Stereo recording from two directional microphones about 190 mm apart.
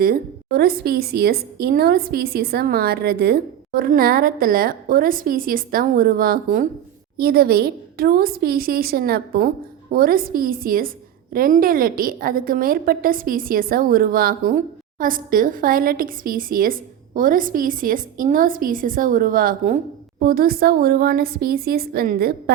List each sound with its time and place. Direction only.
0.0 s a woman's voice: 50° right (ahead or behind)